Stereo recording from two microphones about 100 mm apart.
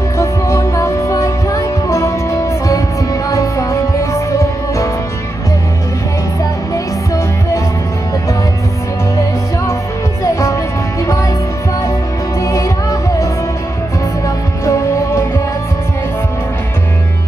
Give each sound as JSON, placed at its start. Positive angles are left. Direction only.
{"t": 0.2, "sound": "music", "side_deg": 30}
{"t": 6.7, "sound": "music", "side_deg": 30}
{"t": 10.2, "sound": "music", "side_deg": 30}
{"t": 12.4, "sound": "music", "side_deg": 30}
{"t": 14.2, "sound": "music", "side_deg": 30}